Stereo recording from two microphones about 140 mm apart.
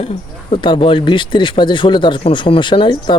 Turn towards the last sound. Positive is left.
turn(degrees=35)  # may be behind; listen again after turning